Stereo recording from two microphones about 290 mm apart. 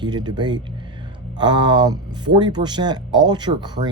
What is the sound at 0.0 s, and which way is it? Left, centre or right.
Speech, centre.